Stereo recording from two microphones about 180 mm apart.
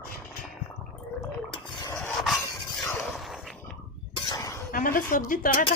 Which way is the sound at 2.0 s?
Centre (ahead or behind).